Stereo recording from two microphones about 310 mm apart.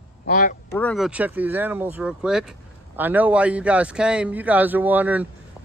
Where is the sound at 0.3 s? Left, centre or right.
Left.